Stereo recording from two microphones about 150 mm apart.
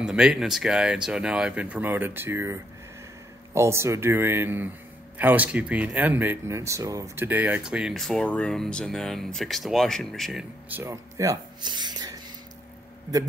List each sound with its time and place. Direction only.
0.0 s speech: 5° right (ahead or behind)
10.7 s speech: 20° right (ahead or behind)